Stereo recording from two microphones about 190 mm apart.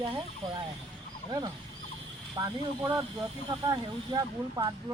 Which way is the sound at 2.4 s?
20° right (ahead or behind).